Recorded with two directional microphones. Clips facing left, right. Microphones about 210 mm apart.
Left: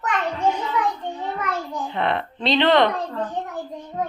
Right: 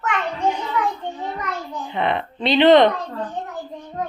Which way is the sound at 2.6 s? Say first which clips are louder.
Right 6 dB; 20° right (ahead or behind).